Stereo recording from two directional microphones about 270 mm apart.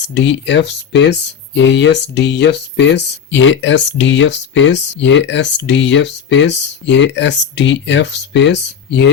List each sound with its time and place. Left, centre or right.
0.1 s speech: left